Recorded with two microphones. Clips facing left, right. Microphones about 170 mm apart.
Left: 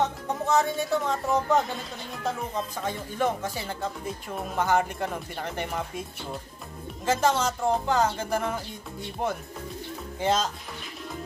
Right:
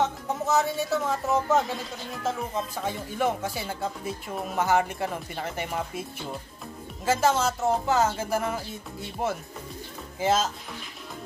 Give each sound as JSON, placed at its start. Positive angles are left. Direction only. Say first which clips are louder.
{"t": 0.0, "sound": "speech", "louder": "even", "side_deg": -5}
{"t": 7.1, "sound": "speech", "louder": "right 1 dB", "side_deg": -5}